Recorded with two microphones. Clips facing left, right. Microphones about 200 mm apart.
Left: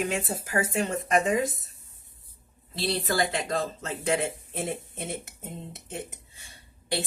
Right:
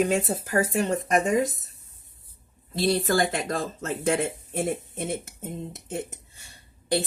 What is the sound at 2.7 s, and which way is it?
Speech, 45° right (ahead or behind).